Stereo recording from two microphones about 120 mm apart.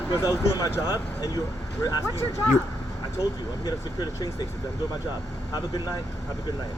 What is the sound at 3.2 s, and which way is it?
Speech, 30° left (ahead or behind).